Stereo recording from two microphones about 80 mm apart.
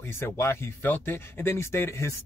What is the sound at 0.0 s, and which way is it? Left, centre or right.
Speech, left.